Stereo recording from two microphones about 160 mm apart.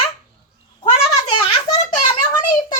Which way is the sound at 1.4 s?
25° left (ahead or behind).